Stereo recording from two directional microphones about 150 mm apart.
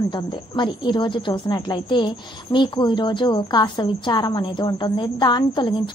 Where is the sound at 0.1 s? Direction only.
30° left (ahead or behind).